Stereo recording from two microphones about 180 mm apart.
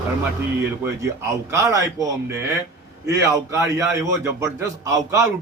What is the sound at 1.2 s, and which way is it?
A man's voice, 15° right (ahead or behind).